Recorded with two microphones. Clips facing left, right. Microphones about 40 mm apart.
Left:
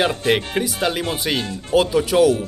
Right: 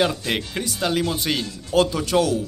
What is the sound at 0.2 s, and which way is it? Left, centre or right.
Speech, left.